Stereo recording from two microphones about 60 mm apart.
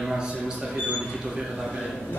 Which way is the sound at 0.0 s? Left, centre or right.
Centre.